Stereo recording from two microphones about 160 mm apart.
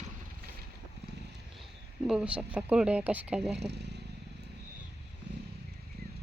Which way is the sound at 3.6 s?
90° right.